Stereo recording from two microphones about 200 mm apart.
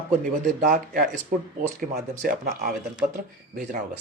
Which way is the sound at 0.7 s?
40° right (ahead or behind).